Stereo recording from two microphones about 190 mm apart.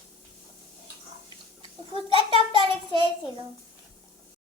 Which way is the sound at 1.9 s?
30° right (ahead or behind).